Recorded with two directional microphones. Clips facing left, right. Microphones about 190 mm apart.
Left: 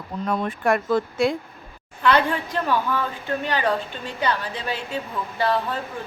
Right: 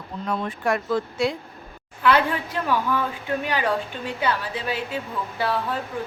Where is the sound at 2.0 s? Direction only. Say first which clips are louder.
Even; 5° right (ahead or behind).